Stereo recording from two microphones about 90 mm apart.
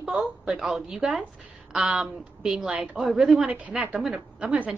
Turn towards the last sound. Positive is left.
turn(degrees=-10)  # may be behind; listen again after turning